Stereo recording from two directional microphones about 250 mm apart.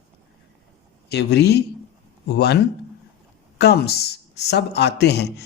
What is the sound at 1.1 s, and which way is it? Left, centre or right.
Speech, left.